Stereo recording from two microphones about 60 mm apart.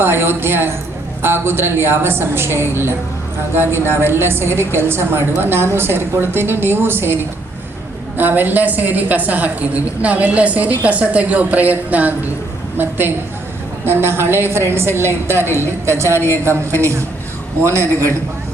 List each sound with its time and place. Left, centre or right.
0.0 s a woman's voice: right
8.2 s a woman's voice: right